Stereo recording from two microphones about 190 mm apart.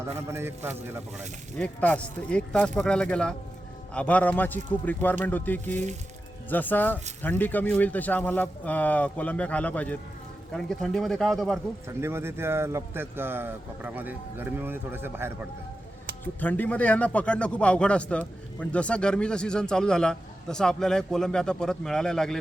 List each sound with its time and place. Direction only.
0.0 s speech: 15° right (ahead or behind)
1.5 s a man's voice: 10° left (ahead or behind)
11.9 s speech: 15° right (ahead or behind)
16.2 s a man's voice: 10° left (ahead or behind)